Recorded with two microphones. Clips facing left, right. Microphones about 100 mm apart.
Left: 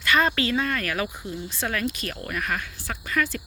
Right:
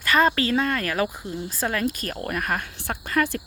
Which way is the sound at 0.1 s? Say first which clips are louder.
Right 2 dB; 35° right (ahead or behind).